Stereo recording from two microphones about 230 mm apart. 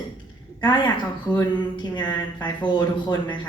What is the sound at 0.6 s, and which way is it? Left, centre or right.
Speech, centre.